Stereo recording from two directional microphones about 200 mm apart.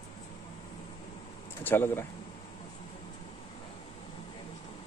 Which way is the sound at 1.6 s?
10° left (ahead or behind).